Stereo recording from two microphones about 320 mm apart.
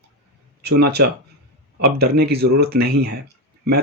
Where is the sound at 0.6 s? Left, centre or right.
Right.